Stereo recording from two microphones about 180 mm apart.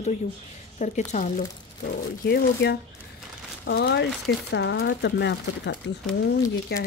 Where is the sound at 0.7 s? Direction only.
40° left (ahead or behind).